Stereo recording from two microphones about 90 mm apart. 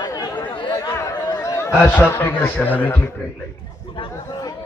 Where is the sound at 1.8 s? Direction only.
20° left (ahead or behind).